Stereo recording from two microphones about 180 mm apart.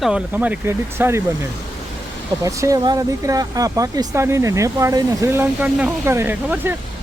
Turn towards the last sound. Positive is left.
turn(degrees=-10)  # may be behind; listen again after turning